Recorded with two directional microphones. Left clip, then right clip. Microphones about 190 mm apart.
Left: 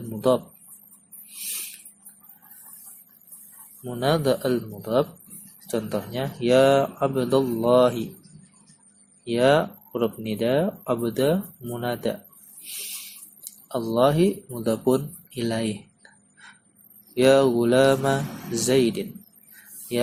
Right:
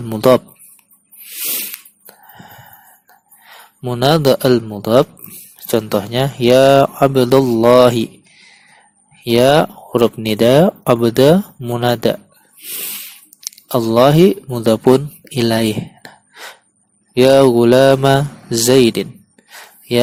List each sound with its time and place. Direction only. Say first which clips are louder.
0.2 s speech: right 11 dB; 50° right (ahead or behind)
3.8 s speech: right 10 dB; 50° right (ahead or behind)
9.2 s speech: right 9 dB; 50° right (ahead or behind)
13.7 s speech: right 10 dB; 45° right (ahead or behind)